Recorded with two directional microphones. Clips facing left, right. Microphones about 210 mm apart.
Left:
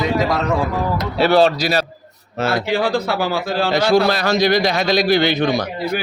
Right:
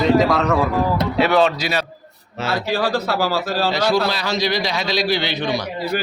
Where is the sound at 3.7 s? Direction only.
50° left (ahead or behind).